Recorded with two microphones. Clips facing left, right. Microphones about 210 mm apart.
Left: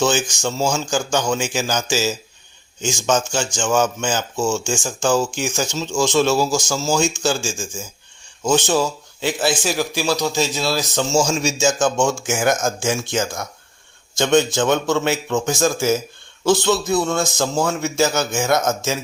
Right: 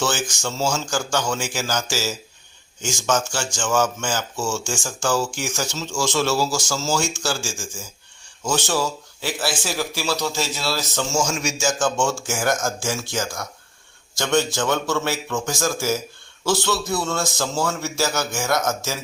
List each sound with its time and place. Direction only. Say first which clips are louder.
0.0 s speech: left 5 dB; 15° left (ahead or behind)
11.2 s a man's voice: left 5 dB; 30° left (ahead or behind)